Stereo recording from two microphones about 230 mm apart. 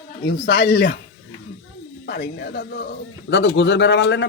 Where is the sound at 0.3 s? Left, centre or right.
Left.